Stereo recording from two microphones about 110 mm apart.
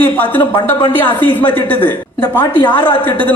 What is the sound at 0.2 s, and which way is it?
A man's voice, 15° left (ahead or behind).